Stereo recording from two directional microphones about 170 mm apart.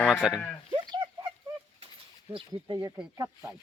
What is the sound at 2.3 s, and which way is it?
Speech, 25° right (ahead or behind).